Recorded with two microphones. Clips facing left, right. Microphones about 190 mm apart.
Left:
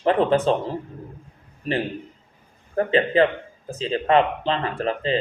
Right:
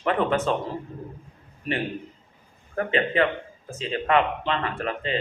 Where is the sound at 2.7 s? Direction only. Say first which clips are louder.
Left 5 dB; 35° left (ahead or behind).